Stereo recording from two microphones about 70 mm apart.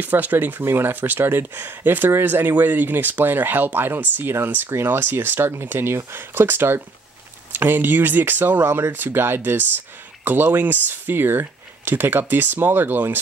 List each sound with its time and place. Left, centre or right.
0.0 s speech: right